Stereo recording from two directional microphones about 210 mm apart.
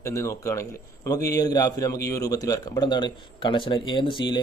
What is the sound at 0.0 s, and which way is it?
A man's voice, 15° left (ahead or behind).